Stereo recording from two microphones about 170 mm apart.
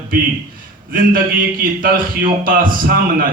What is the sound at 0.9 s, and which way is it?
A man's voice, 55° right (ahead or behind).